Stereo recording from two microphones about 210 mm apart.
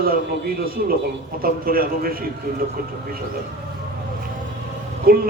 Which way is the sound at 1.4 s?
45° right (ahead or behind).